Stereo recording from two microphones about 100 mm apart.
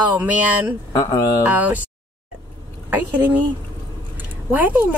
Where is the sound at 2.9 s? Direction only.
15° right (ahead or behind).